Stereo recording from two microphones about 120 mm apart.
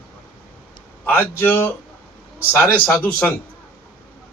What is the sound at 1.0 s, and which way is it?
Speech, 15° left (ahead or behind).